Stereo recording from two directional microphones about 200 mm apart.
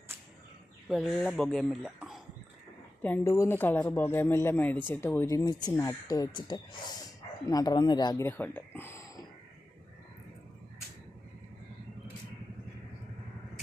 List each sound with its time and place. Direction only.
0.9 s speech: centre (ahead or behind)
3.0 s speech: 10° left (ahead or behind)